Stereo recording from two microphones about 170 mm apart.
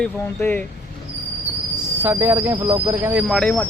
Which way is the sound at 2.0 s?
10° right (ahead or behind).